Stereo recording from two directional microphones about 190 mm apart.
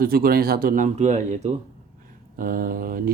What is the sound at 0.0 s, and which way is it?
Speech, 50° right (ahead or behind).